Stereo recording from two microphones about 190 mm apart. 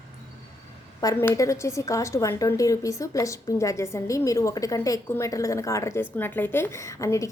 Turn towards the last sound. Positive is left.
turn(degrees=15)  # may be behind; listen again after turning